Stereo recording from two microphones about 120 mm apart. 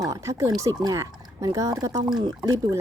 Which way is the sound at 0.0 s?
25° right (ahead or behind).